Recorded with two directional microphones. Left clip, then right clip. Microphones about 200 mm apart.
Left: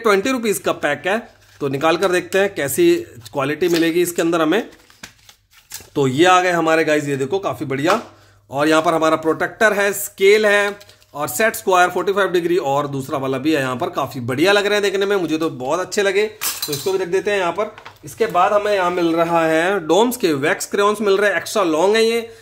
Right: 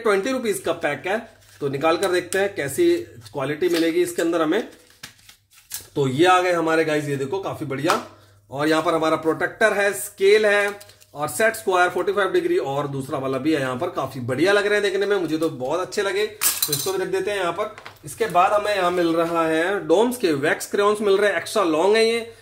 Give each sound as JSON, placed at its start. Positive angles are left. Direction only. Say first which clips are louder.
{"t": 0.0, "sound": "speech", "louder": "left 4 dB", "side_deg": 45}
{"t": 5.9, "sound": "speech", "louder": "left 4 dB", "side_deg": 50}